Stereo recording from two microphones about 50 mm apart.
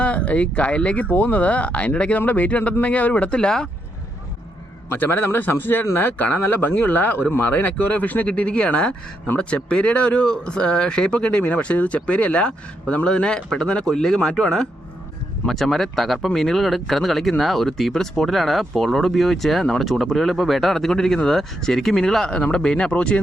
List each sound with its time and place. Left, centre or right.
0.0 s speech: left
4.9 s speech: left
8.3 s speech: left